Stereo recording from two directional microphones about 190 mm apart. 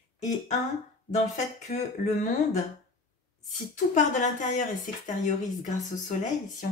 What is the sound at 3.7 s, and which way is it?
Speech, 40° left (ahead or behind).